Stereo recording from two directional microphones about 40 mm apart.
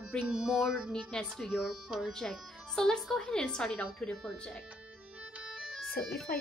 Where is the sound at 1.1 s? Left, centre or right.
Left.